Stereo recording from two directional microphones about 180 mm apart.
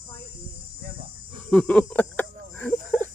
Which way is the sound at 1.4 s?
5° left (ahead or behind).